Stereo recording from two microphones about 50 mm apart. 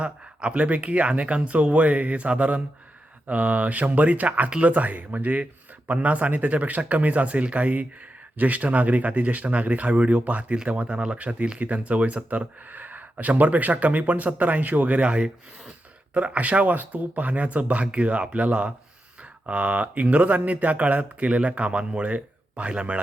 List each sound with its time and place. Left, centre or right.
0.0 s speech: right